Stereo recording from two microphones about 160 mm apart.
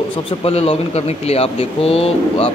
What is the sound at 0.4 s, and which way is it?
Speech, 40° left (ahead or behind).